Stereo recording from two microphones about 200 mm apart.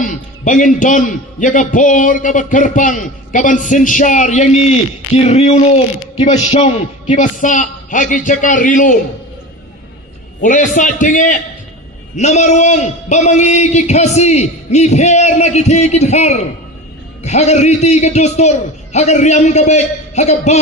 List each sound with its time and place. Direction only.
0.0 s a man's voice: 40° left (ahead or behind)
10.4 s a man's voice: 40° left (ahead or behind)